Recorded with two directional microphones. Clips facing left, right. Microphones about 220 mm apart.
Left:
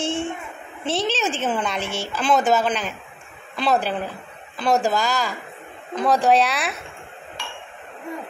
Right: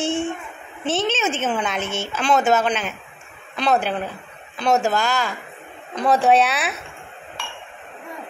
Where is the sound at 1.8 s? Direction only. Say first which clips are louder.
Right 1 dB; 30° left (ahead or behind).